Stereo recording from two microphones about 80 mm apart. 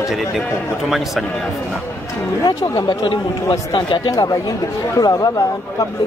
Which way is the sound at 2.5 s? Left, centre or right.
Left.